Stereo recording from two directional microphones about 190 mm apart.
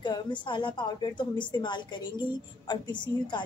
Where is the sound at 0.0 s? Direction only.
25° left (ahead or behind).